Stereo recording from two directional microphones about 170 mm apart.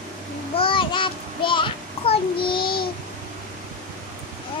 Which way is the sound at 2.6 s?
60° left (ahead or behind).